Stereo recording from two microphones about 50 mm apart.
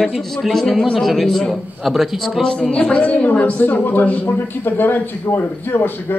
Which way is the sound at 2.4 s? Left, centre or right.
Centre.